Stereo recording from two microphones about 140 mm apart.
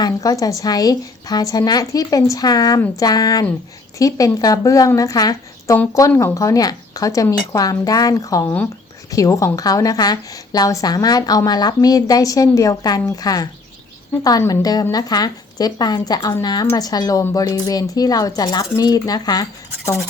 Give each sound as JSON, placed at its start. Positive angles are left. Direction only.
{"t": 0.0, "sound": "a woman's voice", "side_deg": 25}